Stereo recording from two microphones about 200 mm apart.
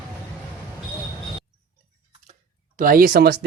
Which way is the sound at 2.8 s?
45° right (ahead or behind).